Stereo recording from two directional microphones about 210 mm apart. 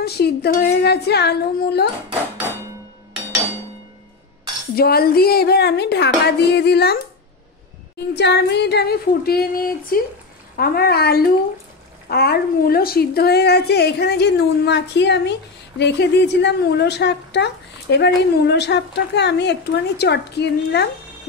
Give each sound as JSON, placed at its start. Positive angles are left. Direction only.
{"t": 0.0, "sound": "a woman's voice", "side_deg": 50}
{"t": 4.7, "sound": "a woman's voice", "side_deg": 45}
{"t": 8.1, "sound": "a woman's voice", "side_deg": 55}